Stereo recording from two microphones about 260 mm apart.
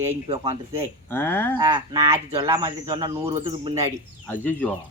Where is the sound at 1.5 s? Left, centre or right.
Centre.